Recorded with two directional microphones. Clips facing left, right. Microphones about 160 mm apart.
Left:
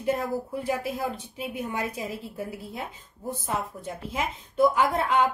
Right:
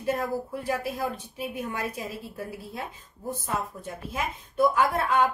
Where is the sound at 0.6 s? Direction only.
20° left (ahead or behind).